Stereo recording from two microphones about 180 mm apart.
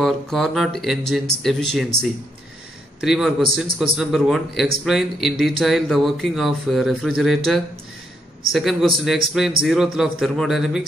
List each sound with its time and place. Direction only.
0.0 s speech: centre (ahead or behind)
3.0 s speech: centre (ahead or behind)